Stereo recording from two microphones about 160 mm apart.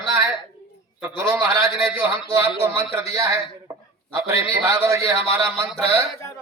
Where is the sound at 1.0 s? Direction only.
15° right (ahead or behind).